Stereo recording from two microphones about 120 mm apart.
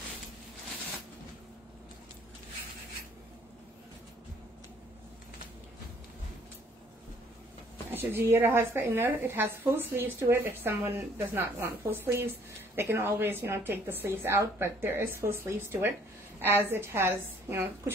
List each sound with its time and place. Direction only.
7.9 s a woman's voice: 20° right (ahead or behind)